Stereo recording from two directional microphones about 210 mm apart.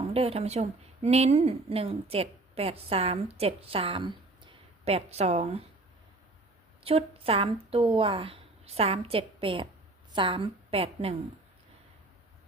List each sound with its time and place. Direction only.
0.1 s speech: 30° right (ahead or behind)
6.8 s a woman's voice: 25° right (ahead or behind)